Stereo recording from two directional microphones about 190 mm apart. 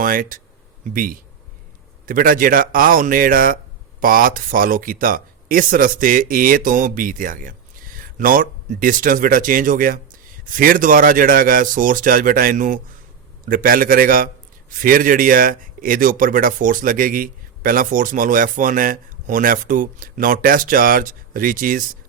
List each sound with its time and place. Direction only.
0.0 s speech: 45° right (ahead or behind)